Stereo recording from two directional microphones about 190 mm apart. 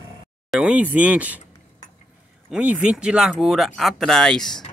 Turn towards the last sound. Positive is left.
turn(degrees=5)  # may be behind; listen again after turning